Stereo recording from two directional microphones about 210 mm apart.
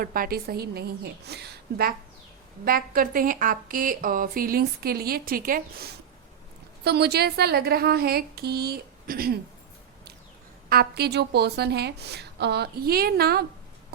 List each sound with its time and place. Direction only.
0.0 s a woman's voice: 45° right (ahead or behind)
10.7 s a woman's voice: 50° right (ahead or behind)